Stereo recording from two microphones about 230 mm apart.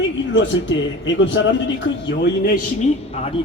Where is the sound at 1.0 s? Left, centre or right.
Left.